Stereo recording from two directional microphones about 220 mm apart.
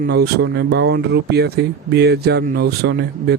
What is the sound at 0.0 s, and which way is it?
Speech, 50° right (ahead or behind).